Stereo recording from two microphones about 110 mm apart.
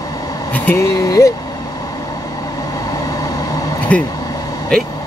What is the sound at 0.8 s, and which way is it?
Speech, 30° left (ahead or behind).